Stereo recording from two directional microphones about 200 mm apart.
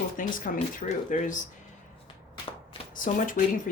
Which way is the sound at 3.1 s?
40° left (ahead or behind).